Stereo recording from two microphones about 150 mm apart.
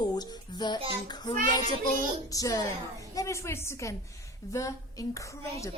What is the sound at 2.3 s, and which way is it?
Speech, 25° left (ahead or behind).